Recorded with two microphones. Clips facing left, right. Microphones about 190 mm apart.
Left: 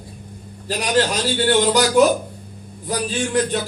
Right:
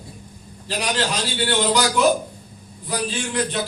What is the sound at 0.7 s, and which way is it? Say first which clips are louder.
A man's voice: left 5 dB; 45° left (ahead or behind).